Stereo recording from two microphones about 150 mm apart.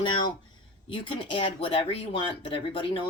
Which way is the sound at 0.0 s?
30° left (ahead or behind).